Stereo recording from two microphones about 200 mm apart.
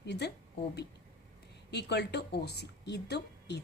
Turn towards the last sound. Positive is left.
turn(degrees=55)  # may be behind; listen again after turning